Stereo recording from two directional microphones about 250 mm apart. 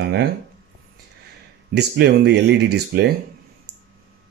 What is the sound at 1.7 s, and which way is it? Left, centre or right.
Speech, right.